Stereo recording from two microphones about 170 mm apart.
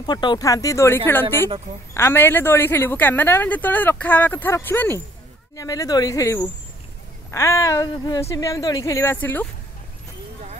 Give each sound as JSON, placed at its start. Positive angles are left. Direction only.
{"t": 0.0, "sound": "a woman's voice", "side_deg": 25}